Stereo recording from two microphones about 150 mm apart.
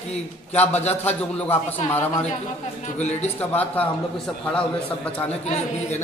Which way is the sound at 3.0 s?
45° left (ahead or behind).